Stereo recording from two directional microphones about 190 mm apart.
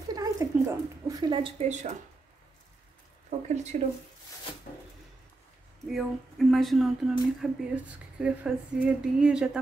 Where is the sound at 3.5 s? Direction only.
35° right (ahead or behind).